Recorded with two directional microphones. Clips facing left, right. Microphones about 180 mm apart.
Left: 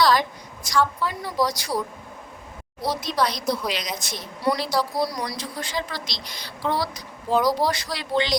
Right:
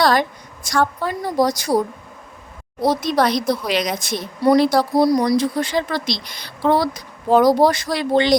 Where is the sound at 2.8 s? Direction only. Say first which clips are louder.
Right 7 dB; 50° right (ahead or behind).